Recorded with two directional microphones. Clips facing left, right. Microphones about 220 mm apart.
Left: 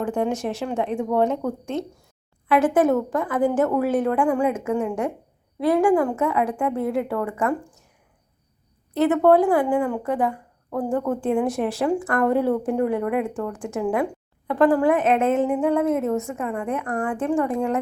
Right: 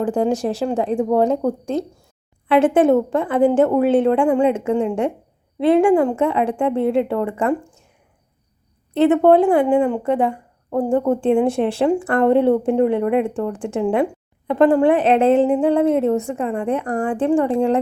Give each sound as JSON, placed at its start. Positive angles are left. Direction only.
{"t": 0.0, "sound": "speech", "side_deg": -35}
{"t": 8.9, "sound": "speech", "side_deg": -25}